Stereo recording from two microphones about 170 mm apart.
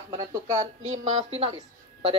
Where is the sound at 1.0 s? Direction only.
40° right (ahead or behind).